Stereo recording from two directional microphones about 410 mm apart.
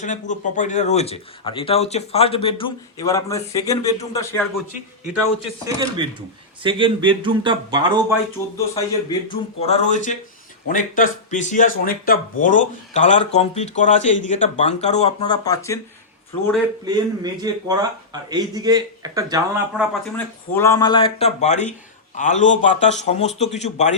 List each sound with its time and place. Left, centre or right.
0.0 s speech: centre
5.5 s speech: centre
8.5 s speech: centre
16.8 s speech: centre